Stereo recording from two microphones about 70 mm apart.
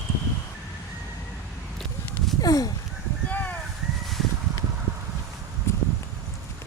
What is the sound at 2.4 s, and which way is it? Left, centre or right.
Speech, left.